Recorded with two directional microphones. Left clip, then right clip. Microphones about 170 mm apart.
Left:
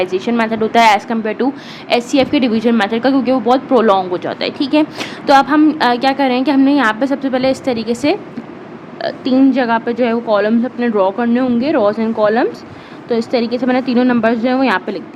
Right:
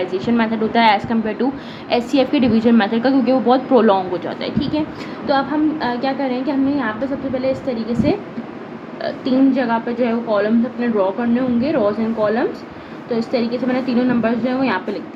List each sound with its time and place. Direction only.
0.0 s a woman's voice: 25° left (ahead or behind); by 15.0 s 50° left (ahead or behind)